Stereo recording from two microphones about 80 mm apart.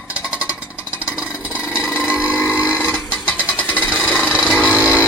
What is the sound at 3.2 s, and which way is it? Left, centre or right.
Vehicle, centre.